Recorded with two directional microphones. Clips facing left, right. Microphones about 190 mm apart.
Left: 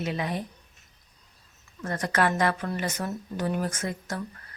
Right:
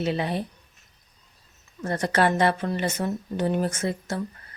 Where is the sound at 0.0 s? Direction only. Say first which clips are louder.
Right 4 dB; 30° right (ahead or behind).